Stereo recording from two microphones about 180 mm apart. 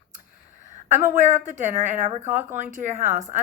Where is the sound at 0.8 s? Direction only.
40° right (ahead or behind).